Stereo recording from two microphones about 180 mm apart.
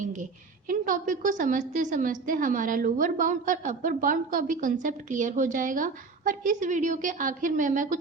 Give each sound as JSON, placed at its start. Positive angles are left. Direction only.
{"t": 0.0, "sound": "a woman's voice", "side_deg": -45}